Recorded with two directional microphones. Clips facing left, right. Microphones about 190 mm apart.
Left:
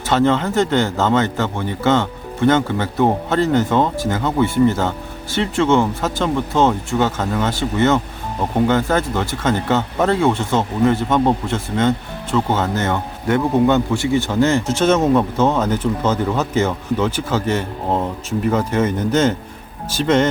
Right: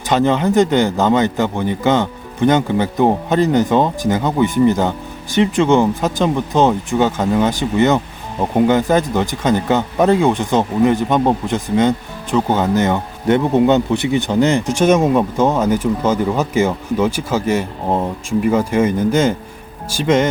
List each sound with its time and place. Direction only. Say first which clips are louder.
0.1 s speech: right 2 dB; 15° right (ahead or behind)